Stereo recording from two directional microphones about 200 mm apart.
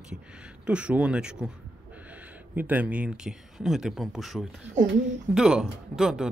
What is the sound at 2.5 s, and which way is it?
Speech, 10° right (ahead or behind).